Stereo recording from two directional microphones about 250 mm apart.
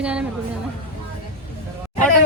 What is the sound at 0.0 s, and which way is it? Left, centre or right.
Speech, centre.